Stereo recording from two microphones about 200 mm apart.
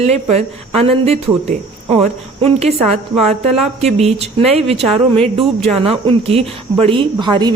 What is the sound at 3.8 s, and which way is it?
Speech, 35° right (ahead or behind).